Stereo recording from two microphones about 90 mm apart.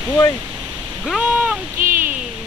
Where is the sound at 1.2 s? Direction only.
15° right (ahead or behind).